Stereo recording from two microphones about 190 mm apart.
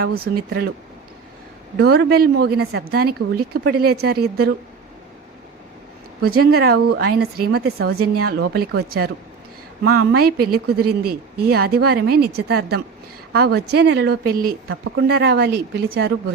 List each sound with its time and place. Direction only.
1.8 s speech: 60° right (ahead or behind)
6.2 s a woman's voice: 55° right (ahead or behind)
14.7 s speech: 65° right (ahead or behind)